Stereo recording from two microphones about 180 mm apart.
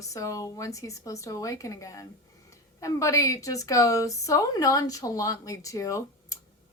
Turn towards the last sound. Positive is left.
turn(degrees=15)  # may be behind; listen again after turning